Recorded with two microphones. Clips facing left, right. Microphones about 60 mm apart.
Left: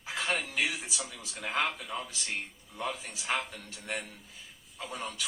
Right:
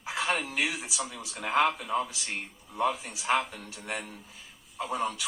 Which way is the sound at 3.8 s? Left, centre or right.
Right.